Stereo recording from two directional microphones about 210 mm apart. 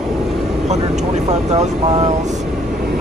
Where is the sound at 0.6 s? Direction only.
35° right (ahead or behind).